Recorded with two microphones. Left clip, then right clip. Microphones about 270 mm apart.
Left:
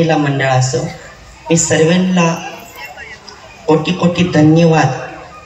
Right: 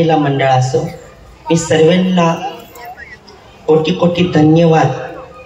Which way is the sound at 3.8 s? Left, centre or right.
Right.